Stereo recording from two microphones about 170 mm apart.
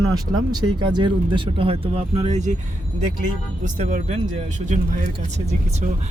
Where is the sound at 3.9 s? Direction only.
45° right (ahead or behind).